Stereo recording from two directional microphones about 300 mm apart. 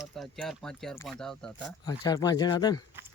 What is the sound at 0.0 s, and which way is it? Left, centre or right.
Speech, centre.